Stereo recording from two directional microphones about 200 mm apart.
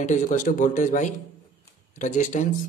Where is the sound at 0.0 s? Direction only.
40° left (ahead or behind).